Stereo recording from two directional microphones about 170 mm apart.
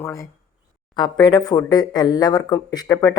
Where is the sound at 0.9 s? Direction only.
25° left (ahead or behind).